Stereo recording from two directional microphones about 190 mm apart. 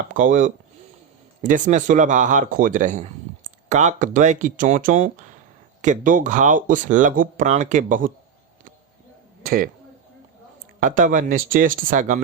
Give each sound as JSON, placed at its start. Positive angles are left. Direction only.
{"t": 0.1, "sound": "speech", "side_deg": -45}
{"t": 9.4, "sound": "a sound", "side_deg": -50}
{"t": 10.8, "sound": "speech", "side_deg": -45}